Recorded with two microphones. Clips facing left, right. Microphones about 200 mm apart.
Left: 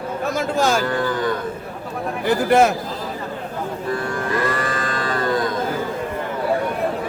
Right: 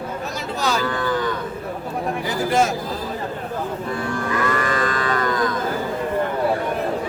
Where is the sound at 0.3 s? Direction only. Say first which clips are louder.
Left 4 dB; 50° left (ahead or behind).